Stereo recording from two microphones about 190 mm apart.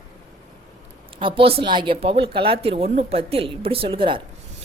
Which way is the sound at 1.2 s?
30° right (ahead or behind).